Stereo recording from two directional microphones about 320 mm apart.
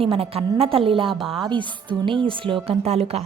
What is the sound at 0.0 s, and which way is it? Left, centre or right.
A woman's voice, centre.